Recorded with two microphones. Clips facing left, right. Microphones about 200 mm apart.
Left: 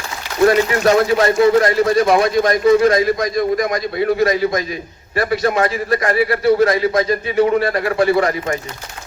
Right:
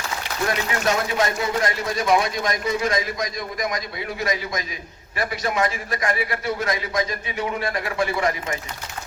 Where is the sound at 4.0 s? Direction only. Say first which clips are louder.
Left 13 dB; 40° left (ahead or behind).